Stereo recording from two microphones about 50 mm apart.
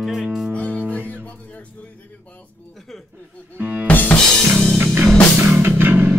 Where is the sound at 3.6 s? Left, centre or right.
Right.